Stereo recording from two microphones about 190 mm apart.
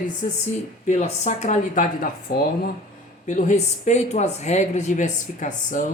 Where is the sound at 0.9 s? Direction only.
35° left (ahead or behind).